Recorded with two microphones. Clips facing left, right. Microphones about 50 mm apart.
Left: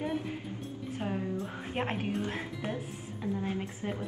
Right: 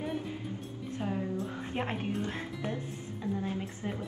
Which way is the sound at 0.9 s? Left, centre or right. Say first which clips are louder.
Right 1 dB; centre.